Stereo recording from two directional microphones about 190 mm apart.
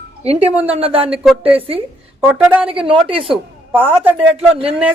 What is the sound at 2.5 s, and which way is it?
Speech, 5° right (ahead or behind).